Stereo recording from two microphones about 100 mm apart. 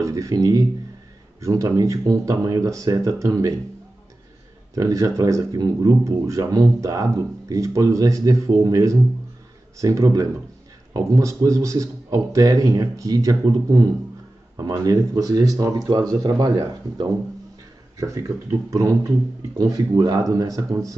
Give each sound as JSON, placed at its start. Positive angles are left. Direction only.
{"t": 0.0, "sound": "speech", "side_deg": -30}
{"t": 4.7, "sound": "speech", "side_deg": -35}
{"t": 17.9, "sound": "speech", "side_deg": -30}